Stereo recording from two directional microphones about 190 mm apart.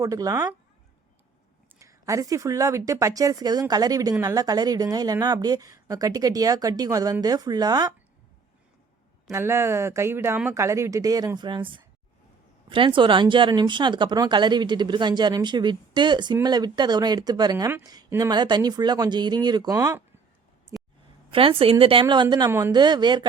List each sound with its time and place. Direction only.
0.0 s speech: 15° right (ahead or behind)
1.8 s speech: 15° right (ahead or behind)
9.3 s speech: 15° right (ahead or behind)
21.2 s speech: 30° right (ahead or behind)